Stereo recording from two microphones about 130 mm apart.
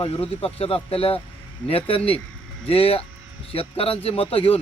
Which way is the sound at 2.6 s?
50° left (ahead or behind).